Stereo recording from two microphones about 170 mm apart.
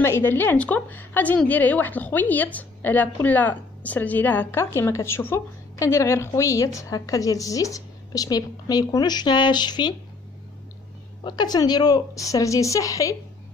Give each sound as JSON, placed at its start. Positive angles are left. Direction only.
{"t": 0.0, "sound": "a woman's voice", "side_deg": 15}
{"t": 11.2, "sound": "speech", "side_deg": 25}